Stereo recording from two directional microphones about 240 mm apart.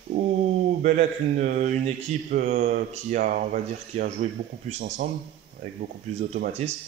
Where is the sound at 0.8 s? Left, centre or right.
Right.